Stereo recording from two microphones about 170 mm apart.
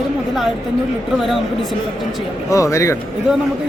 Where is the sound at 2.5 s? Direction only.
20° left (ahead or behind).